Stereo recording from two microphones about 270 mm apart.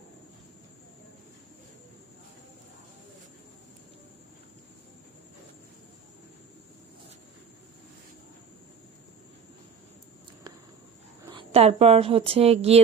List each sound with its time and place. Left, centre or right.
11.3 s a woman's voice: centre